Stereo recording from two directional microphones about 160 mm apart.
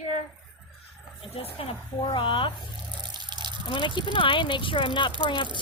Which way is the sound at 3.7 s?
30° left (ahead or behind).